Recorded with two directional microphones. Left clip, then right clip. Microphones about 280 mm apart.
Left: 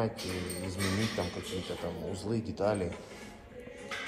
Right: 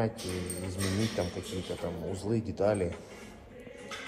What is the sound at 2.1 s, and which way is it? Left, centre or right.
Speech, centre.